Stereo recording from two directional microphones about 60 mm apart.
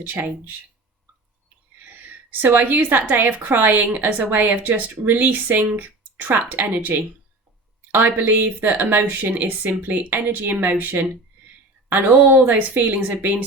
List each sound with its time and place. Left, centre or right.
0.0 s a woman's voice: right
2.4 s a woman's voice: right